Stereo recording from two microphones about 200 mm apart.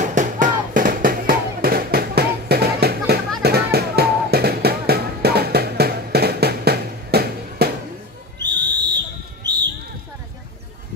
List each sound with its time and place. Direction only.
0.0 s music: 40° right (ahead or behind)
8.5 s whistle: 20° right (ahead or behind)
9.5 s basketball bounce: 20° right (ahead or behind)